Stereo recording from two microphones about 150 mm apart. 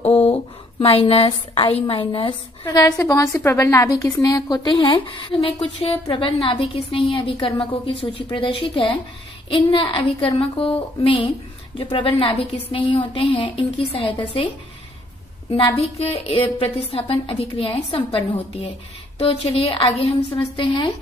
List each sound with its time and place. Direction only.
0.0 s a sound: 45° left (ahead or behind)
1.8 s a woman's voice: 35° left (ahead or behind)
15.5 s speech: 40° left (ahead or behind)